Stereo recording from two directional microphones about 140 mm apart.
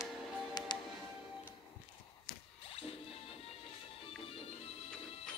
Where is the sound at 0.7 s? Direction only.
30° left (ahead or behind).